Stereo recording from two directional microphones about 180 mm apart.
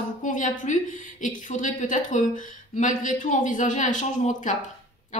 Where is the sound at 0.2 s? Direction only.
45° left (ahead or behind).